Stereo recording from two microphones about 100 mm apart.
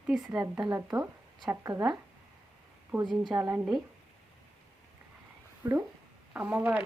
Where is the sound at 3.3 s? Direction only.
30° right (ahead or behind).